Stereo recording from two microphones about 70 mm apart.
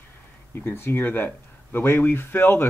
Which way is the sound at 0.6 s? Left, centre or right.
Left.